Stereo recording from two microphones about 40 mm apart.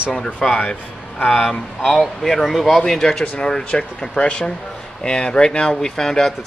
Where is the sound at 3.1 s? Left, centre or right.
Left.